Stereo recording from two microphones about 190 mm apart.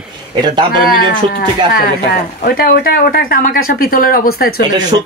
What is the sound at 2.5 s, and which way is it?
Speech, 50° left (ahead or behind).